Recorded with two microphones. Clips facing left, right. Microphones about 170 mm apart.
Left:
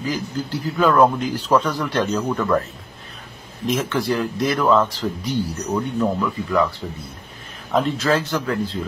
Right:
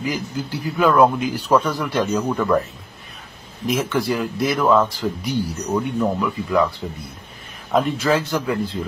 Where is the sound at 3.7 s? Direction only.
5° right (ahead or behind).